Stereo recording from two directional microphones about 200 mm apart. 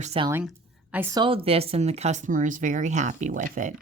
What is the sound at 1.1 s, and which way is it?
Speech, 25° right (ahead or behind).